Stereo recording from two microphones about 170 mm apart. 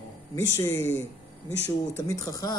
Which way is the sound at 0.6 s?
15° left (ahead or behind).